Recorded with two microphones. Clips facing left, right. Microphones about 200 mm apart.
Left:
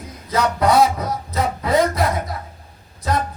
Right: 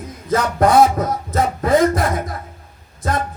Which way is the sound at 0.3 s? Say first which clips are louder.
Right 2 dB; 50° right (ahead or behind).